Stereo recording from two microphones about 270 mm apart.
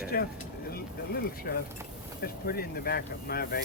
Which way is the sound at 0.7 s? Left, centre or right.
Left.